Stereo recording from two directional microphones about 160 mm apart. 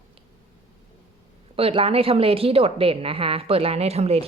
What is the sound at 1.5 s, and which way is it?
A woman's voice, 35° right (ahead or behind).